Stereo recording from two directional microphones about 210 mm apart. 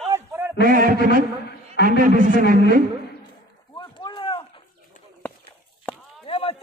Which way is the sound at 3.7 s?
25° left (ahead or behind).